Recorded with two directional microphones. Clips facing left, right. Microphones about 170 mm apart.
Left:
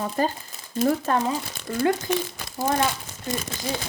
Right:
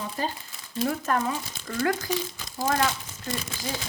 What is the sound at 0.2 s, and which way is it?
Speech, 50° left (ahead or behind).